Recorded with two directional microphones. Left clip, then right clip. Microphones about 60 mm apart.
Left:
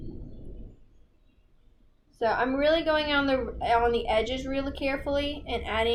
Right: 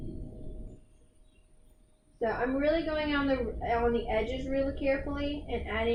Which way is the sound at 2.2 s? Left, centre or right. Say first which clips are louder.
Left 5 dB; left.